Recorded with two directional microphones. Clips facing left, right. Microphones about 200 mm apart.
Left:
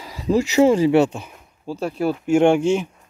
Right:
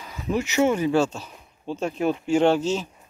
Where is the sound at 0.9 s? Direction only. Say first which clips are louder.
Left 5 dB; 15° left (ahead or behind).